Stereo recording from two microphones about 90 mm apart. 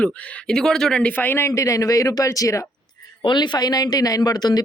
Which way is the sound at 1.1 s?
20° left (ahead or behind).